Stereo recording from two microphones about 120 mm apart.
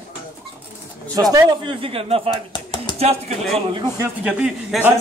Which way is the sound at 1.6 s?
45° right (ahead or behind).